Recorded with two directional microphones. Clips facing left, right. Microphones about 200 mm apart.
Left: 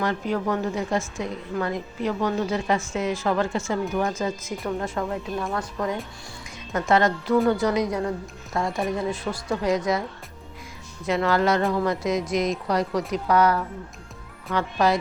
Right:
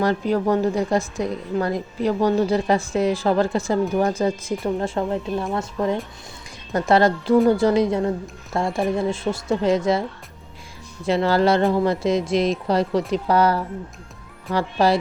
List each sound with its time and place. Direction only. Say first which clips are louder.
0.0 s a woman's voice: right 5 dB; 35° right (ahead or behind)
11.0 s a woman's voice: right 4 dB; 30° right (ahead or behind)